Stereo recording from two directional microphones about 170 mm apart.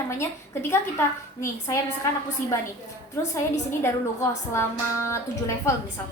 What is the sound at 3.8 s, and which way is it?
A woman's voice, 15° left (ahead or behind).